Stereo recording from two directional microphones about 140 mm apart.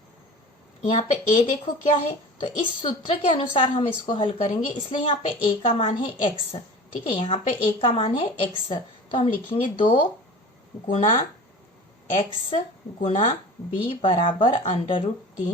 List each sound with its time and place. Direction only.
0.8 s speech: 45° left (ahead or behind)
13.0 s speech: 40° left (ahead or behind)